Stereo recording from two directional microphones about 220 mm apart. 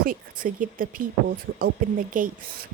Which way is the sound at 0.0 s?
40° right (ahead or behind).